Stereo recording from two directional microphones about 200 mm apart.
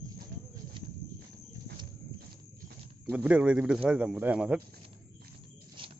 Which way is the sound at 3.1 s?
5° right (ahead or behind).